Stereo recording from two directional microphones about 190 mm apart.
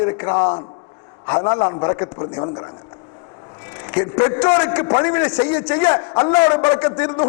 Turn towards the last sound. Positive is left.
turn(degrees=10)  # may be behind; listen again after turning